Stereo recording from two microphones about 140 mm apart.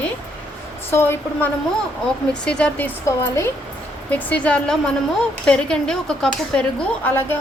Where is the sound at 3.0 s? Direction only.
20° left (ahead or behind).